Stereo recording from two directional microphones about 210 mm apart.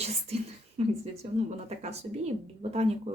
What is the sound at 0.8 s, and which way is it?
Speech, 30° right (ahead or behind).